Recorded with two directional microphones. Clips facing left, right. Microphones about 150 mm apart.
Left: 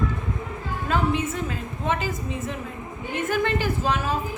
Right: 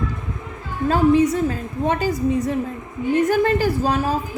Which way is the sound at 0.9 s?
35° right (ahead or behind).